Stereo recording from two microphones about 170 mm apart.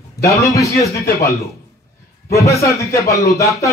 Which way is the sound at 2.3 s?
20° left (ahead or behind).